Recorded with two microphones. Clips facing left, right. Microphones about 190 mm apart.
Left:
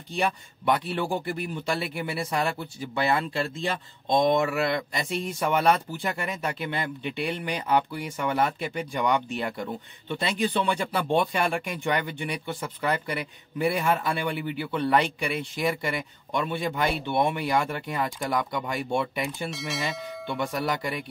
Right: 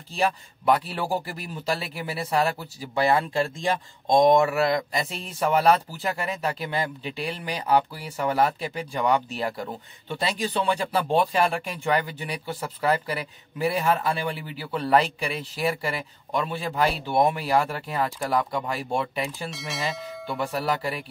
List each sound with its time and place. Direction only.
0.1 s speech: 35° right (ahead or behind)
19.5 s speech: centre (ahead or behind)
20.5 s speech: 30° right (ahead or behind)